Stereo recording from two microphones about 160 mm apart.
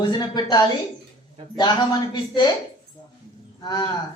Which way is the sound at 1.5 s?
25° left (ahead or behind).